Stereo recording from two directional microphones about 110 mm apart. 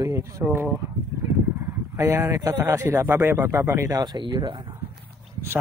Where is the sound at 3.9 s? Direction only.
40° right (ahead or behind).